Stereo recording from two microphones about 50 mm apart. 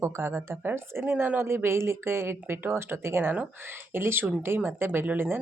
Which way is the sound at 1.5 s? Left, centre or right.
Right.